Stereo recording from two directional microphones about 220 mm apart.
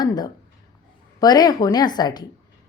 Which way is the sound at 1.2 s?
15° left (ahead or behind).